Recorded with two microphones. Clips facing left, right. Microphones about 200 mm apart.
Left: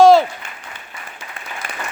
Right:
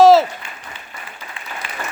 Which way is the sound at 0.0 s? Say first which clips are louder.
Even; 5° right (ahead or behind).